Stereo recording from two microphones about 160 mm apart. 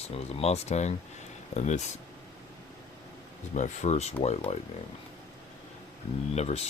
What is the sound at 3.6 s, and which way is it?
Speech, 45° left (ahead or behind).